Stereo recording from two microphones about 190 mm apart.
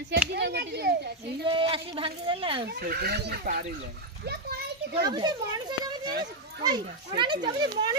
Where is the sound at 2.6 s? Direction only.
55° right (ahead or behind).